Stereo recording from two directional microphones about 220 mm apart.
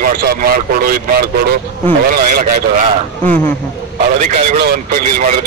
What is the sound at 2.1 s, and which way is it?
Speech, 40° right (ahead or behind).